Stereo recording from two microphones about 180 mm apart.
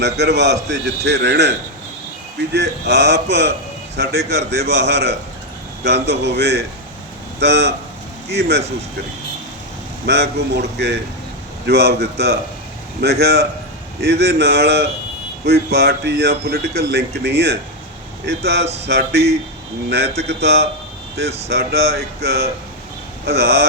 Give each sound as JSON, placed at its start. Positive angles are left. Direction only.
{"t": 0.0, "sound": "speech", "side_deg": -70}
{"t": 10.1, "sound": "speech", "side_deg": -70}
{"t": 20.2, "sound": "speech", "side_deg": -65}